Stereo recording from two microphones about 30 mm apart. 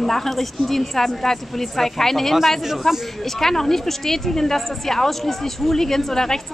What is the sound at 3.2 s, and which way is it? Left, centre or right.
Speech, centre.